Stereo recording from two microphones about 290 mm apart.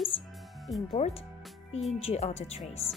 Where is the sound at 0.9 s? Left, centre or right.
Left.